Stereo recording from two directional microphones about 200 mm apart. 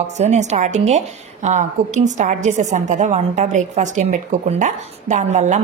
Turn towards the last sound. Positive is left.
turn(degrees=-35)  # may be behind; listen again after turning